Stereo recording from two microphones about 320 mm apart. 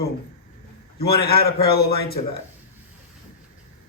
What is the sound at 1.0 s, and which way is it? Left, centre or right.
A man's voice, left.